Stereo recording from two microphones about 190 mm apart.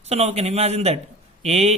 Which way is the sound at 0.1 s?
35° right (ahead or behind).